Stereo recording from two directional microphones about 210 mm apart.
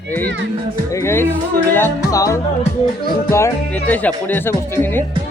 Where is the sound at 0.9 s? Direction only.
10° left (ahead or behind).